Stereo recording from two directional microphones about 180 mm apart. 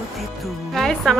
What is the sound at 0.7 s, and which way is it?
Speech, centre (ahead or behind).